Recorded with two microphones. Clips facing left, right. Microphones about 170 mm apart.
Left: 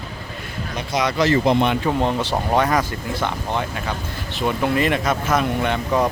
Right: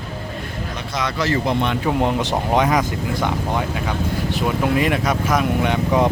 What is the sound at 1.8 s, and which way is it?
Speech, 15° right (ahead or behind).